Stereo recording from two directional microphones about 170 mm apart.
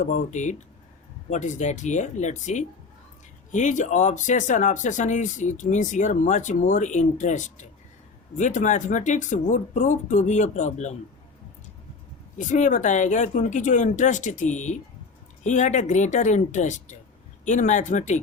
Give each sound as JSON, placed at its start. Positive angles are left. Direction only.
{"t": 0.0, "sound": "speech", "side_deg": 45}
{"t": 12.4, "sound": "speech", "side_deg": 45}